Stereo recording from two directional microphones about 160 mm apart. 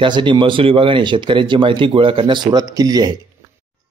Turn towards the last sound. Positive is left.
turn(degrees=-25)  # may be behind; listen again after turning